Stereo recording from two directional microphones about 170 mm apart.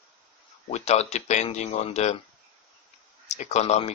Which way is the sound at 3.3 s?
40° left (ahead or behind).